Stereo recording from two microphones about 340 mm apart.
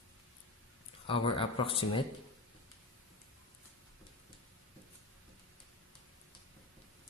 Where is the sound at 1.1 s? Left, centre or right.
Centre.